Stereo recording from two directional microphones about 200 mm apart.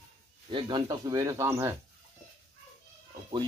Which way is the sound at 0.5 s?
25° right (ahead or behind).